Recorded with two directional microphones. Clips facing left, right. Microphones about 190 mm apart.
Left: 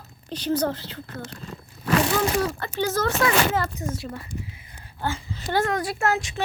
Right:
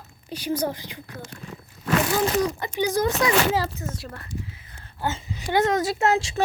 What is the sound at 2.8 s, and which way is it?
Speech, 15° right (ahead or behind).